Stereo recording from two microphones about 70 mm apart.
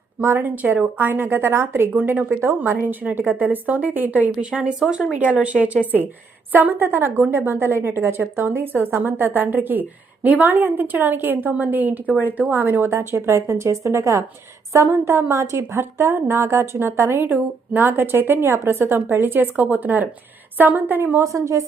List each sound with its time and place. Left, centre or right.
0.2 s a woman's voice: right
21.2 s speech: right